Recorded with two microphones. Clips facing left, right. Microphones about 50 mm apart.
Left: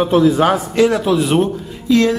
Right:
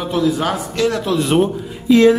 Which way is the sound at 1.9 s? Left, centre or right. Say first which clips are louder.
Right 2 dB; centre.